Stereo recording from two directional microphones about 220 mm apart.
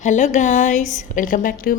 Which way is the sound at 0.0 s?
35° left (ahead or behind).